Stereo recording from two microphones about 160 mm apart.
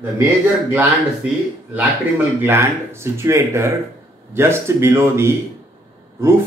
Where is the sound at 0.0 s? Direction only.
15° right (ahead or behind).